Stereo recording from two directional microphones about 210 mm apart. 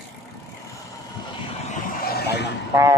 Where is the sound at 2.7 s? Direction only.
15° right (ahead or behind).